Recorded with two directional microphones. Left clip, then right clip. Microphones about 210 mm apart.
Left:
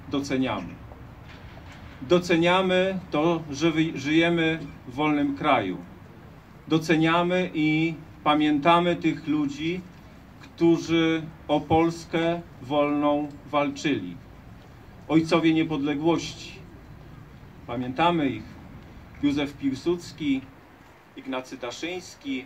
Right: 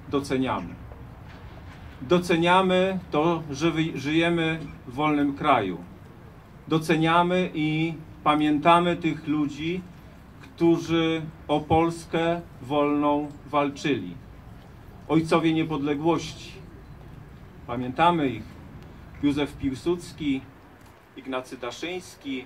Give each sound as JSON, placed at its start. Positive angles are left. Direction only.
{"t": 0.1, "sound": "speech", "side_deg": 15}
{"t": 2.0, "sound": "speech", "side_deg": 15}
{"t": 15.0, "sound": "speech", "side_deg": 15}
{"t": 17.6, "sound": "speech", "side_deg": 15}